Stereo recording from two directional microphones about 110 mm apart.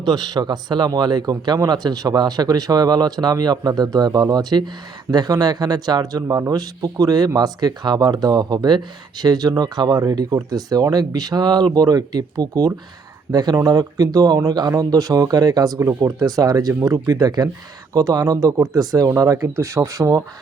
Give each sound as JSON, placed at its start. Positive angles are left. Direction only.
{"t": 0.0, "sound": "speech", "side_deg": -40}